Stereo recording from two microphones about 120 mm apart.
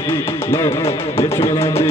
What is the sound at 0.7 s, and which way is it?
Music, 55° left (ahead or behind).